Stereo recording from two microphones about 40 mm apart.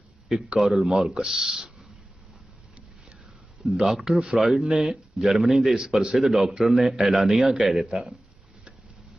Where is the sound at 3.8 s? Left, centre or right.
Centre.